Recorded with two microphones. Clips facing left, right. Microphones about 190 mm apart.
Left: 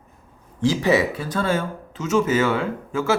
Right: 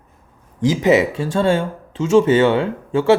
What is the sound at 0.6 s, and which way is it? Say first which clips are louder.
A man's voice: right 4 dB; 20° right (ahead or behind).